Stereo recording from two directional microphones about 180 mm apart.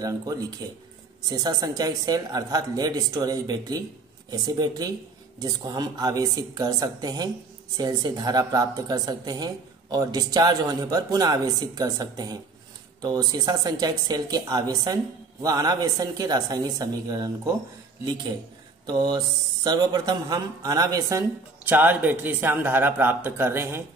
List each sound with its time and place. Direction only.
0.6 s a woman's voice: 25° right (ahead or behind)
18.9 s a woman's voice: 25° right (ahead or behind)
21.6 s a man's voice: 10° right (ahead or behind)